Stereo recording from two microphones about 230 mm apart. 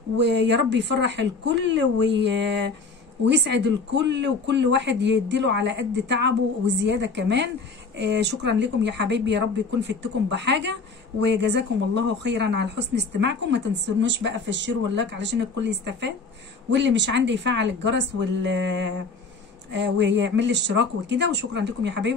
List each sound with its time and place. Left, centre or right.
0.3 s speech: right